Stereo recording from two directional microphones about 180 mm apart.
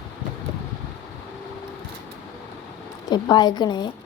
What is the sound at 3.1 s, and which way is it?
Speech, 25° left (ahead or behind).